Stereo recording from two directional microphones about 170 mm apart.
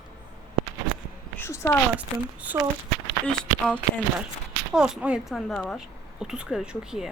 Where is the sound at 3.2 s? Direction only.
5° left (ahead or behind).